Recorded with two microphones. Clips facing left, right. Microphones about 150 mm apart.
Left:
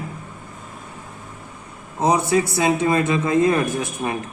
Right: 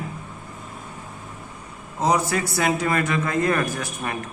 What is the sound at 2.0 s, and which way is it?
Speech, 25° left (ahead or behind).